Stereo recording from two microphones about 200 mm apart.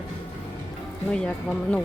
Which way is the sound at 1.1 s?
5° left (ahead or behind).